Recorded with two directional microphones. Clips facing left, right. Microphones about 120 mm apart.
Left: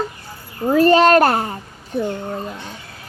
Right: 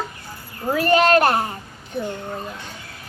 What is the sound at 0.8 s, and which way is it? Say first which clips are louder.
Speech: left 4 dB; 35° left (ahead or behind).